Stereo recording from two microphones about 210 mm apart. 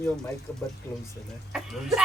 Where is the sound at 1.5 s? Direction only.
Centre (ahead or behind).